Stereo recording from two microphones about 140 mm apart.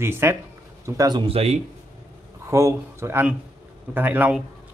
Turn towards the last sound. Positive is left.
turn(degrees=-10)  # may be behind; listen again after turning